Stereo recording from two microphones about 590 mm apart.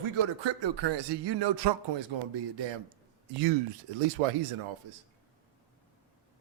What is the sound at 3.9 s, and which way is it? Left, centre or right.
Speech, right.